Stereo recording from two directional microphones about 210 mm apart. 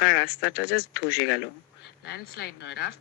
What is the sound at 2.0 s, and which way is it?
Speech, 55° left (ahead or behind).